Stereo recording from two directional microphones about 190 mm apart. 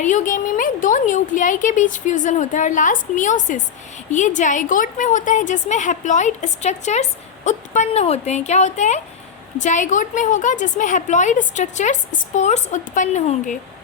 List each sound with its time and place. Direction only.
0.0 s a woman's voice: 40° left (ahead or behind)